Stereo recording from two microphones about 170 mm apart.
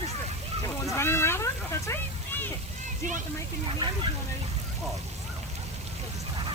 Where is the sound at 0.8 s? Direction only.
15° left (ahead or behind).